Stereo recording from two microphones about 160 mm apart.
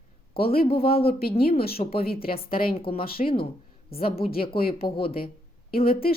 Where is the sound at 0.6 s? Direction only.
35° left (ahead or behind).